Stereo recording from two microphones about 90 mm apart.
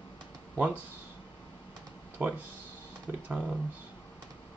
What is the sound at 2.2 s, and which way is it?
Speech, 20° right (ahead or behind).